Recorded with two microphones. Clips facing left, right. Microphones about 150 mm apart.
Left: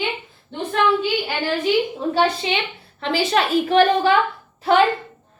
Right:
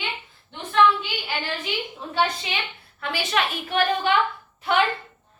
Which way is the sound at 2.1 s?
30° left (ahead or behind).